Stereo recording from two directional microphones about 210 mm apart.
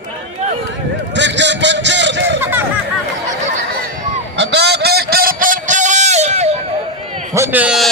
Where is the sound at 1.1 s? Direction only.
55° right (ahead or behind).